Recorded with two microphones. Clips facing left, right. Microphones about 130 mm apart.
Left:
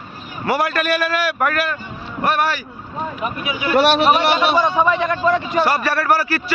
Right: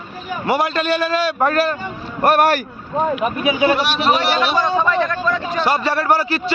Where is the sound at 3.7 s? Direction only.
60° left (ahead or behind).